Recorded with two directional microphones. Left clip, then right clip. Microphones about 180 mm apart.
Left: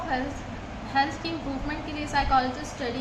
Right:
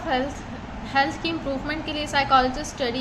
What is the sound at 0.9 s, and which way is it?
A woman's voice, 35° right (ahead or behind).